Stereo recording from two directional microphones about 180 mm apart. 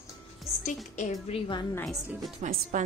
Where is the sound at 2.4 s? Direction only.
45° right (ahead or behind).